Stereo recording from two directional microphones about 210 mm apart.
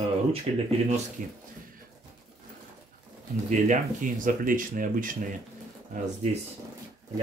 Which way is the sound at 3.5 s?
35° right (ahead or behind).